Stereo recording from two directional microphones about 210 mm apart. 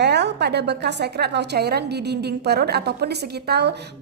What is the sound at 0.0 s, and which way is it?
A woman's voice, 55° right (ahead or behind).